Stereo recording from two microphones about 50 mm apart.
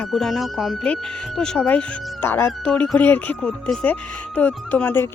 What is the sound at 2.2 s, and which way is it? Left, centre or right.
Speech, left.